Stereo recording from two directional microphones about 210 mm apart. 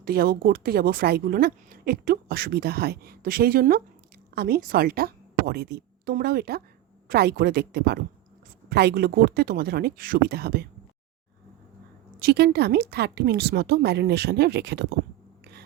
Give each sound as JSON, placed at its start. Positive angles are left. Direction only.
{"t": 0.0, "sound": "a woman's voice", "side_deg": -45}
{"t": 12.2, "sound": "speech", "side_deg": -50}